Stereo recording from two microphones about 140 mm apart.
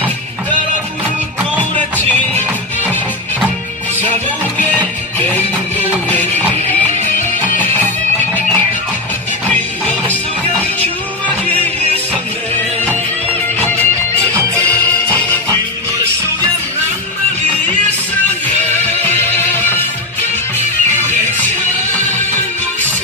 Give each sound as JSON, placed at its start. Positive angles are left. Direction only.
{"t": 2.0, "sound": "music", "side_deg": 15}
{"t": 4.6, "sound": "music", "side_deg": 10}
{"t": 10.8, "sound": "music", "side_deg": 10}
{"t": 15.0, "sound": "music", "side_deg": 10}
{"t": 19.0, "sound": "music", "side_deg": 15}